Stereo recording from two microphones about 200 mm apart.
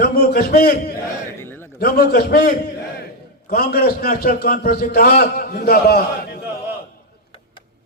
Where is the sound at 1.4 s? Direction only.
10° left (ahead or behind).